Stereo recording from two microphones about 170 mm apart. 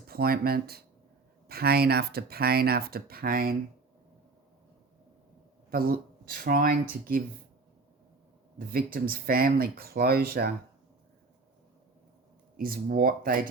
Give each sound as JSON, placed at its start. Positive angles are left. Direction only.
{"t": 0.1, "sound": "speech", "side_deg": -65}
{"t": 5.7, "sound": "speech", "side_deg": -60}
{"t": 8.5, "sound": "speech", "side_deg": -60}
{"t": 12.5, "sound": "speech", "side_deg": -60}